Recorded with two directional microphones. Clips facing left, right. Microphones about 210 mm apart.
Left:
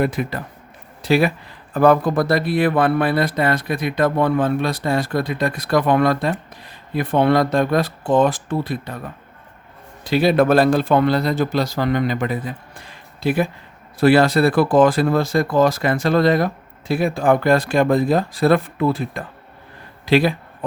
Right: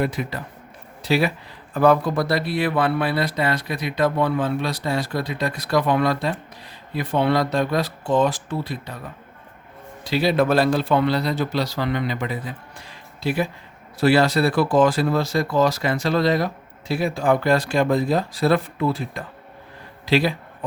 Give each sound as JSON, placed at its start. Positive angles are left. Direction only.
{"t": 0.0, "sound": "speech", "side_deg": 50}
{"t": 10.0, "sound": "speech", "side_deg": 50}